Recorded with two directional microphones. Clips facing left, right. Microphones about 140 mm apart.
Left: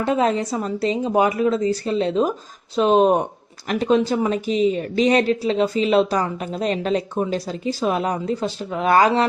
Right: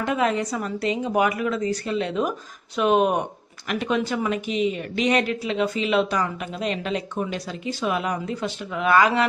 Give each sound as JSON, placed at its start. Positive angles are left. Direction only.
{"t": 0.0, "sound": "speech", "side_deg": 30}